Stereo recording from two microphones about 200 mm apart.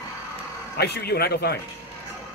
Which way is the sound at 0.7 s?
55° left (ahead or behind).